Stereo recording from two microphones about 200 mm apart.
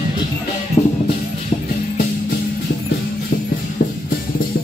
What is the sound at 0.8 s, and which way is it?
Music, 30° left (ahead or behind).